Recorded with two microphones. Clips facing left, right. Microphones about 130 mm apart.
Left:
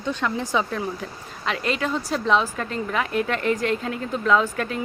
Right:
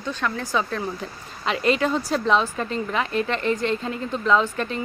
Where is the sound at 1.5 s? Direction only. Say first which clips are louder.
Right 4 dB; centre (ahead or behind).